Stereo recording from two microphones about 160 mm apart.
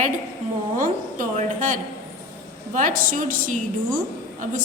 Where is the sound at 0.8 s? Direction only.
55° right (ahead or behind).